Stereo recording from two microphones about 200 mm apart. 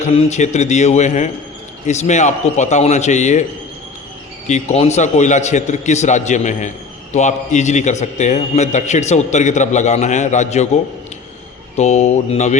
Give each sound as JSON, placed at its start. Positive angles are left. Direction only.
{"t": 0.0, "sound": "a man's voice", "side_deg": 35}
{"t": 4.4, "sound": "a man's voice", "side_deg": 35}
{"t": 11.8, "sound": "a man's voice", "side_deg": 35}